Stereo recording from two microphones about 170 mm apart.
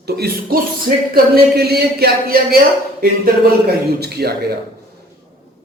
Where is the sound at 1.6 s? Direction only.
70° right (ahead or behind).